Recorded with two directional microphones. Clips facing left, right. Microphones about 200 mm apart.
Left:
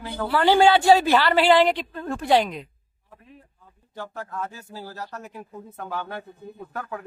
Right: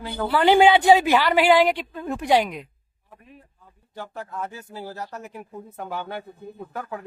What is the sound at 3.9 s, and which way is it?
A woman's voice, 15° right (ahead or behind).